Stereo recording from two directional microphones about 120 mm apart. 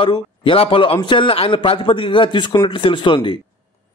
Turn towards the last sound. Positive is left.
turn(degrees=40)  # may be behind; listen again after turning